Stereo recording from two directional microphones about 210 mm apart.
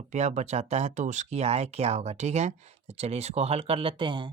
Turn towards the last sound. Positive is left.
turn(degrees=-25)  # may be behind; listen again after turning